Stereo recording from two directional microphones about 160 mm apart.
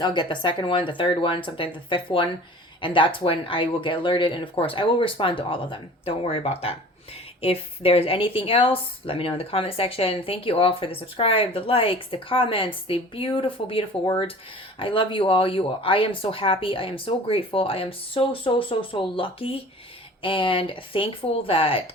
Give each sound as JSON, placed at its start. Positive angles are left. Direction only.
{"t": 0.0, "sound": "a woman's voice", "side_deg": 30}